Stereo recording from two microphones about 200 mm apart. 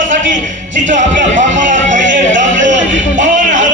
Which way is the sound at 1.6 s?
40° right (ahead or behind).